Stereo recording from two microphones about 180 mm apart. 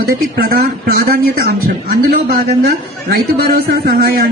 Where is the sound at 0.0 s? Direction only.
60° right (ahead or behind).